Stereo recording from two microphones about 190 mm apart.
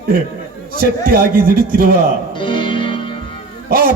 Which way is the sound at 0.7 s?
50° right (ahead or behind).